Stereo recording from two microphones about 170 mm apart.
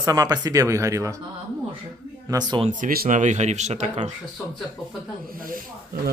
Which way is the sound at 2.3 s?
25° right (ahead or behind).